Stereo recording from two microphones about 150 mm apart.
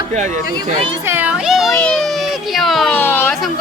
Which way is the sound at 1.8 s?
Centre (ahead or behind).